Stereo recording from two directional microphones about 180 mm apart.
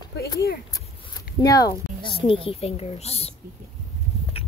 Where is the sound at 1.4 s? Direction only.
20° left (ahead or behind); by 3.3 s 35° left (ahead or behind).